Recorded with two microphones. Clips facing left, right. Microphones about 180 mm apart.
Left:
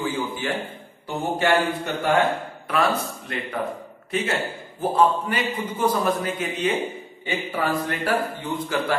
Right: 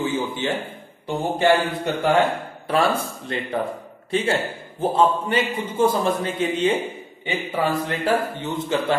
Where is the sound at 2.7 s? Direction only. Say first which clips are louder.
Right 2 dB; 30° right (ahead or behind).